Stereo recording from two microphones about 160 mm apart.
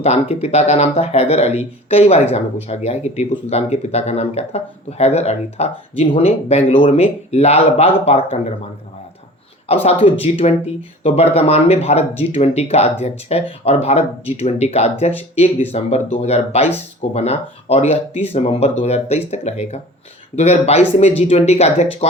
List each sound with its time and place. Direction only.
0.0 s speech: 40° left (ahead or behind)
9.6 s speech: 40° left (ahead or behind)